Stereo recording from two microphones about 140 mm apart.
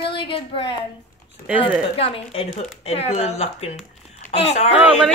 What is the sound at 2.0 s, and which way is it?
Speech, 45° left (ahead or behind).